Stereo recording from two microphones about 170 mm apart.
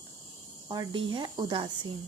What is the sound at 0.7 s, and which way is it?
Speech, 25° right (ahead or behind).